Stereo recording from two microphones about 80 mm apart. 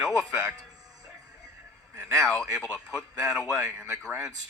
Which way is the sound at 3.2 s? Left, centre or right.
Centre.